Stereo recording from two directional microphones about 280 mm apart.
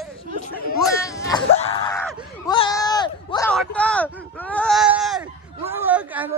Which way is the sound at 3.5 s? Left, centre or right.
Centre.